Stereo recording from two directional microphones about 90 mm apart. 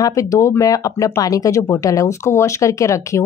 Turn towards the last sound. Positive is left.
turn(degrees=35)  # may be behind; listen again after turning